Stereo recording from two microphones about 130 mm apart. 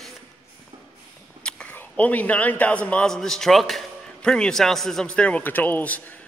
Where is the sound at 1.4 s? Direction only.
10° left (ahead or behind).